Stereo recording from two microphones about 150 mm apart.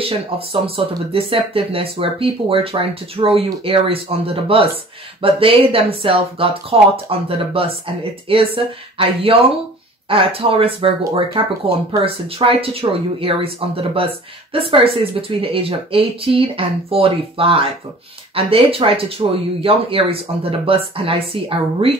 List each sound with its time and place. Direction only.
0.0 s speech: 40° right (ahead or behind)